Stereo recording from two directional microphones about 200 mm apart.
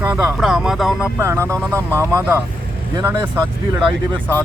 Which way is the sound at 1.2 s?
15° right (ahead or behind).